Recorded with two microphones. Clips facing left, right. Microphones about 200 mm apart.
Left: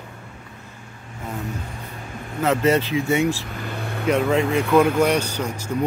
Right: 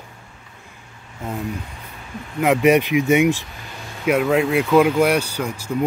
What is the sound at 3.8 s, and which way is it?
Vehicle, 60° left (ahead or behind).